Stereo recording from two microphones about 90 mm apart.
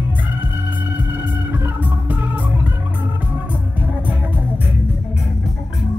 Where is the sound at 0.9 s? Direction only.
25° right (ahead or behind).